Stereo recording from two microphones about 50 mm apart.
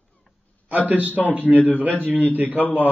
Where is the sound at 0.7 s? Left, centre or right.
Right.